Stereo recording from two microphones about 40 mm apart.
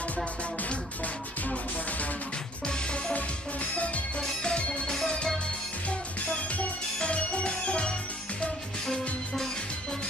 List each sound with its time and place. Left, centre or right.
0.2 s music: left
4.2 s music: centre
4.6 s music: left
4.8 s music: centre
5.9 s music: left
8.8 s music: centre